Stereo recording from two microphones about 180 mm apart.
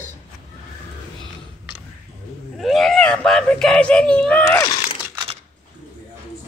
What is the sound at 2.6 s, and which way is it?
A child's voice, centre (ahead or behind).